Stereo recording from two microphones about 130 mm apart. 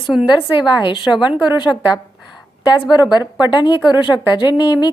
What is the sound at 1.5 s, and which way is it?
Speech, 35° left (ahead or behind).